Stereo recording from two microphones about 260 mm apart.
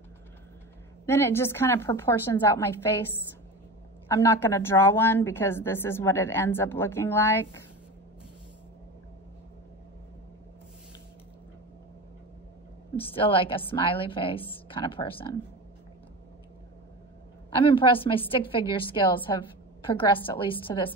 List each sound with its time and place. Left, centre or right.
1.0 s a woman's voice: centre
4.1 s a woman's voice: centre
13.0 s a woman's voice: left
17.6 s a woman's voice: centre